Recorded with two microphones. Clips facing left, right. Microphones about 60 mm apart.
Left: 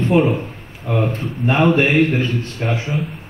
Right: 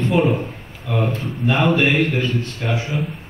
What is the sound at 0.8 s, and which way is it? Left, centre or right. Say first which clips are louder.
A man's voice: left 2 dB; left.